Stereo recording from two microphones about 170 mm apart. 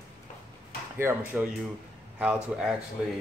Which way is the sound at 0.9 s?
15° right (ahead or behind).